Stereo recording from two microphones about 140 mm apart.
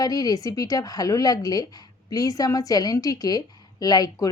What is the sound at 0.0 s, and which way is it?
A woman's voice, 25° left (ahead or behind).